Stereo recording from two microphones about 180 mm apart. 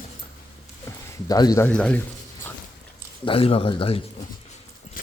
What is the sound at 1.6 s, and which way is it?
Speech, 5° left (ahead or behind).